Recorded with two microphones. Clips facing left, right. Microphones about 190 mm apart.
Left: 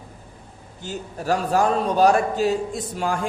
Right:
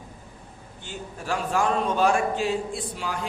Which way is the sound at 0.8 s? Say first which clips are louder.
Left 7 dB; 40° left (ahead or behind).